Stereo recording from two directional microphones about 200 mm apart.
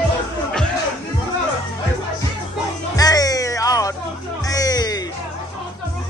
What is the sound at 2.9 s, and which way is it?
Music, 20° left (ahead or behind).